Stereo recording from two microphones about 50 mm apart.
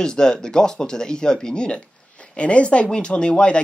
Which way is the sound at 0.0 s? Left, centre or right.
Centre.